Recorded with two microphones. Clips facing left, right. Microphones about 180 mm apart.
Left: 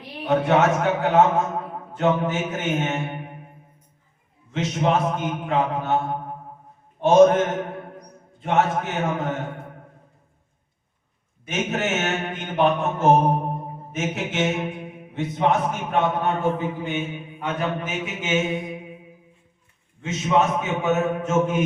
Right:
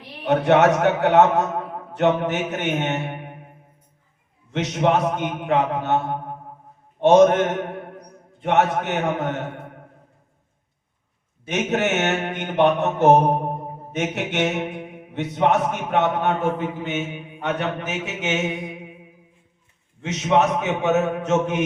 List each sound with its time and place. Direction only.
0.3 s mantra: 70° right (ahead or behind)
4.5 s mantra: 70° right (ahead or behind)
7.0 s mantra: 70° right (ahead or behind)
11.4 s mantra: 70° right (ahead or behind)
20.0 s mantra: 75° right (ahead or behind)